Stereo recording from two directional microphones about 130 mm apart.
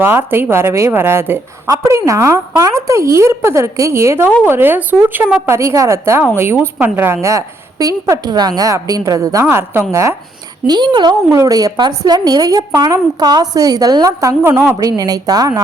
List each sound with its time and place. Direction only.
0.0 s a woman's voice: 15° right (ahead or behind)
10.7 s a woman's voice: 35° right (ahead or behind)
14.5 s a woman's voice: 15° right (ahead or behind)
14.8 s a woman's voice: 30° right (ahead or behind)